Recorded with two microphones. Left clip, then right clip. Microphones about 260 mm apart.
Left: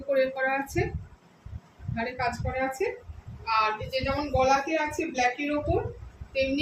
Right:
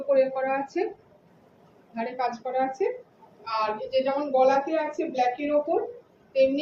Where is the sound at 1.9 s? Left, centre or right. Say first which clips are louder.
Right 1 dB; centre.